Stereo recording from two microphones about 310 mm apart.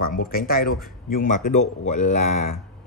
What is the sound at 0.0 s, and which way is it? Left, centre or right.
Speech, left.